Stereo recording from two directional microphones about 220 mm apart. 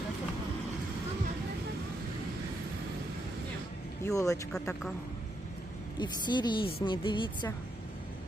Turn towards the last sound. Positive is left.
turn(degrees=20)  # may be behind; listen again after turning